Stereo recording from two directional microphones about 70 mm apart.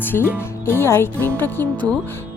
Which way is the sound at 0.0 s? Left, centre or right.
Left.